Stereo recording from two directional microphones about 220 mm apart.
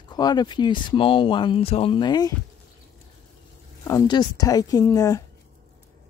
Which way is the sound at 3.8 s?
15° left (ahead or behind).